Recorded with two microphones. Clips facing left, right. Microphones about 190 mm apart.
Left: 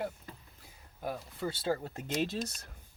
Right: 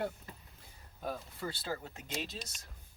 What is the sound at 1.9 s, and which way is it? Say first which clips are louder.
Speech: left 8 dB; 50° left (ahead or behind).